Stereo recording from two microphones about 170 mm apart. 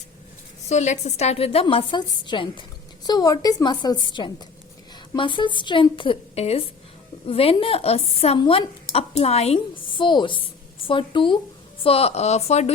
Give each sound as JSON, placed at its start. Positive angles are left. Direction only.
{"t": 0.7, "sound": "a woman's voice", "side_deg": 45}